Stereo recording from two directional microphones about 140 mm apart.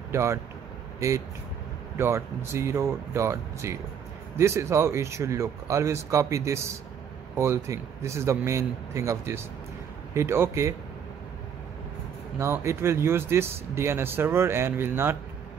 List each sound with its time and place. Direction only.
0.1 s speech: 20° right (ahead or behind)
12.4 s speech: 20° right (ahead or behind)